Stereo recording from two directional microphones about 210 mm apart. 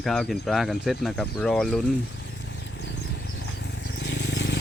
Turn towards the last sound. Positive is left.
turn(degrees=55)  # may be behind; listen again after turning